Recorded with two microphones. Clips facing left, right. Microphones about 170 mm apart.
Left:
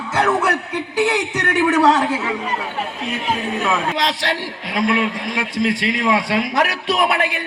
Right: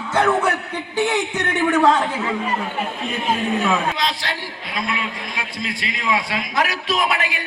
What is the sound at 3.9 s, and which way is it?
A man's voice, 75° left (ahead or behind).